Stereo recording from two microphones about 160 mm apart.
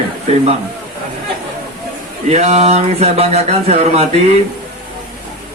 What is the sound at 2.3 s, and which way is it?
Speech, 45° right (ahead or behind).